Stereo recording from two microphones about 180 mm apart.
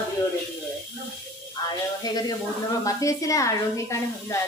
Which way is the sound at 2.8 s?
20° left (ahead or behind).